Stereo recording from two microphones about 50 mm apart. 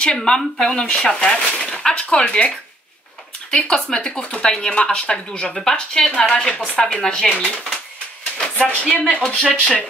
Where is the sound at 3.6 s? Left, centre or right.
Centre.